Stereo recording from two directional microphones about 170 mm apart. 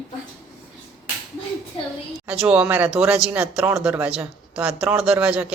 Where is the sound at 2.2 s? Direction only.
5° right (ahead or behind).